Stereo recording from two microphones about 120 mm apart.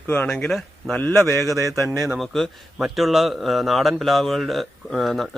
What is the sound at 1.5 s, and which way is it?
Speech, 30° right (ahead or behind).